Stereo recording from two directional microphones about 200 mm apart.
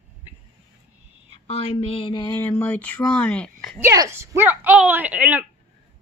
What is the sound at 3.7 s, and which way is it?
A woman's voice, 15° right (ahead or behind).